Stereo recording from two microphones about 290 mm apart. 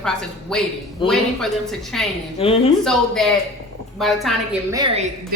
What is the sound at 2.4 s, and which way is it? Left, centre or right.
Speech, centre.